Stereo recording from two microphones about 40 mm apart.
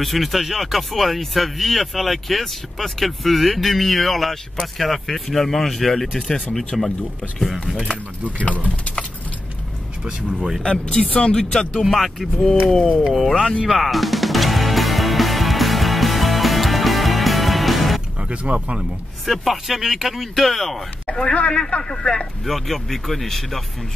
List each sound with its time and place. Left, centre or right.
0.0 s speech: centre
10.6 s speech: left
11.8 s speech: centre
13.0 s speech: centre
13.7 s music: centre
18.3 s speech: right
19.2 s speech: centre
21.5 s speech: left
22.5 s speech: centre